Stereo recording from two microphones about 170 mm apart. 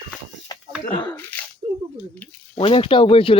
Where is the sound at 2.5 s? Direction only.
30° left (ahead or behind).